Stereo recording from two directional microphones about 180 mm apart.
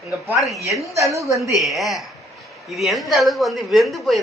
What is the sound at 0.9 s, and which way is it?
Speech, 15° right (ahead or behind).